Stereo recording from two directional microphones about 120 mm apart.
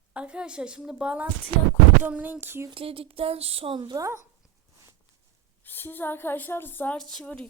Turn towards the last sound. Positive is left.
turn(degrees=5)  # may be behind; listen again after turning